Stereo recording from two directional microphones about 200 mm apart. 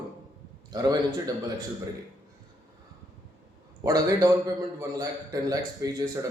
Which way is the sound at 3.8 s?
15° right (ahead or behind).